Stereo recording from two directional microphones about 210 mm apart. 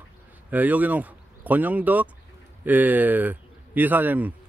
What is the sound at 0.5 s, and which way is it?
A man's voice, 5° right (ahead or behind).